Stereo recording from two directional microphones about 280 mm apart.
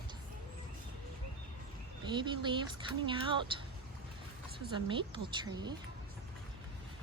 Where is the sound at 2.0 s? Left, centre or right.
Centre.